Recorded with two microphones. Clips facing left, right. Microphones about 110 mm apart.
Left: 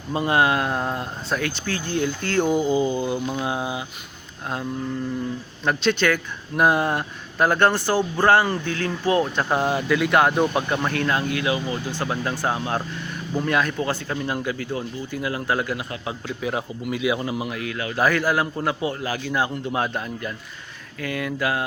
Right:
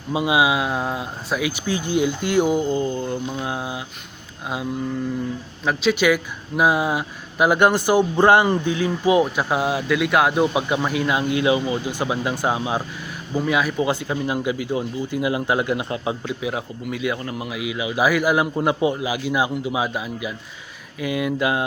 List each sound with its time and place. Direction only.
0.1 s speech: 10° right (ahead or behind)
2.5 s mantra: 5° left (ahead or behind)
5.6 s speech: 5° right (ahead or behind); by 16.3 s 20° right (ahead or behind)
16.4 s mantra: centre (ahead or behind)
17.6 s speech: 10° right (ahead or behind)